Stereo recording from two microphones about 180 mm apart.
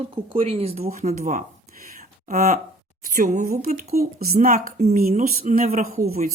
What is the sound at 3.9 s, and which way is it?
Speech, 55° right (ahead or behind).